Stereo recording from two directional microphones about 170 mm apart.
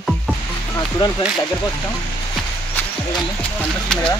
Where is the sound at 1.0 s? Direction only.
25° left (ahead or behind).